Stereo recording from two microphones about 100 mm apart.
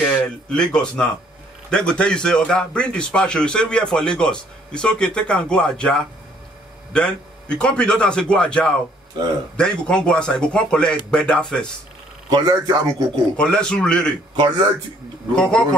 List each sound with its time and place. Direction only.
0.0 s a man's voice: 5° left (ahead or behind)
12.3 s a man's voice: 40° right (ahead or behind)
13.4 s a man's voice: 10° left (ahead or behind)
15.3 s a man's voice: 10° left (ahead or behind)